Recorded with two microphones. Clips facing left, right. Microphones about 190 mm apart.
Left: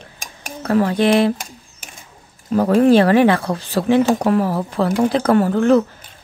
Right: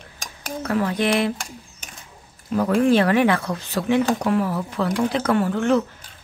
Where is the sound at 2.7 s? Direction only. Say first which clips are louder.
Left 5 dB; 35° left (ahead or behind).